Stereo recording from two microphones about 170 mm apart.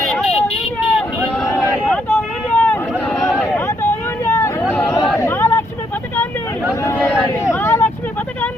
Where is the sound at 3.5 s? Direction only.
15° left (ahead or behind).